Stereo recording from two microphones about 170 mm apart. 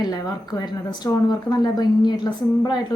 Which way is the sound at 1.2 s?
25° left (ahead or behind).